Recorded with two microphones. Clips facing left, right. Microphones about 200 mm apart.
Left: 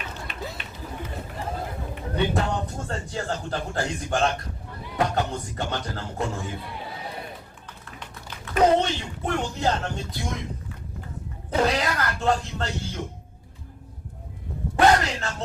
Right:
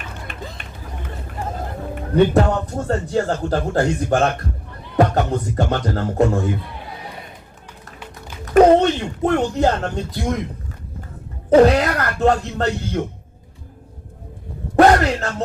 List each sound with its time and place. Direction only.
0.3 s run: 50° right (ahead or behind)
2.0 s music: 50° right (ahead or behind)
2.8 s speech: 45° right (ahead or behind)
8.5 s speech: 55° right (ahead or behind)
11.5 s speech: 55° right (ahead or behind)
14.8 s speech: 55° right (ahead or behind)